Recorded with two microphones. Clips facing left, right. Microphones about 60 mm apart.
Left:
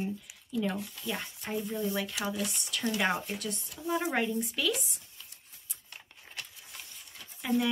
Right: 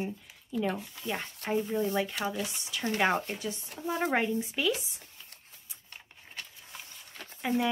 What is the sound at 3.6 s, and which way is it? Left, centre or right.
Speech, right.